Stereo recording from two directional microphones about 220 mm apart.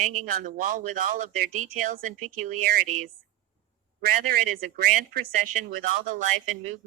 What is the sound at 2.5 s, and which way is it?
Speech, 40° right (ahead or behind).